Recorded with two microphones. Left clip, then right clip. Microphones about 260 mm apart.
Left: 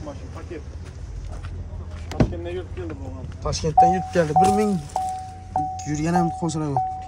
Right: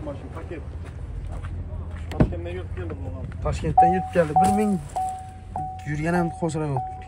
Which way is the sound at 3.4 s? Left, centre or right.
Centre.